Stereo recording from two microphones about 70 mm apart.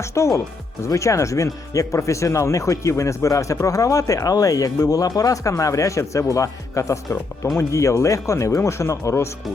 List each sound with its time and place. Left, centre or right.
0.0 s speech: left